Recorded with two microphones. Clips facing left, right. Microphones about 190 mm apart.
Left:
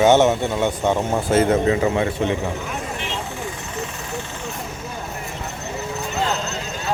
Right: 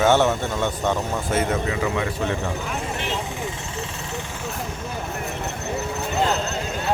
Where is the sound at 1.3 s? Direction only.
35° left (ahead or behind).